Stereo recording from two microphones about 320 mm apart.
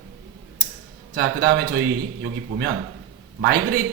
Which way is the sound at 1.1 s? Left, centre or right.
Right.